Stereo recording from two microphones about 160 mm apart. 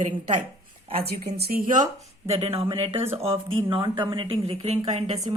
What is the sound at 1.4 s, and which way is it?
A woman's voice, 70° right (ahead or behind).